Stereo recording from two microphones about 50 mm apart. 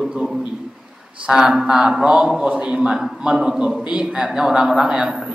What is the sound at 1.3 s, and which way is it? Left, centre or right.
A man's voice, centre.